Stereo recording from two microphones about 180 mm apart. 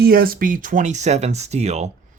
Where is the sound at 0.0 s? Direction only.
55° right (ahead or behind).